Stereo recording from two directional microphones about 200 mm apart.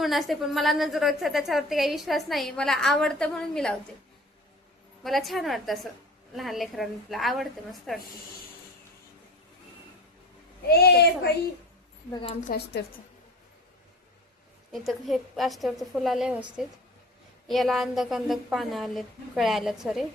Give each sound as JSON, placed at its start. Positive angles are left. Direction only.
{"t": 0.0, "sound": "a woman's voice", "side_deg": 0}
{"t": 5.0, "sound": "a woman's voice", "side_deg": 0}
{"t": 10.7, "sound": "speech", "side_deg": 50}
{"t": 12.2, "sound": "a woman's voice", "side_deg": 35}
{"t": 12.8, "sound": "a woman's voice", "side_deg": 60}
{"t": 14.7, "sound": "a woman's voice", "side_deg": 0}